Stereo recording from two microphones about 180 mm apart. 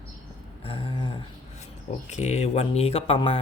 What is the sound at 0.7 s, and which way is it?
Speech, 30° left (ahead or behind).